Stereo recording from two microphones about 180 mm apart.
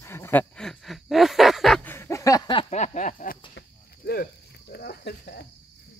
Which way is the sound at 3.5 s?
60° left (ahead or behind).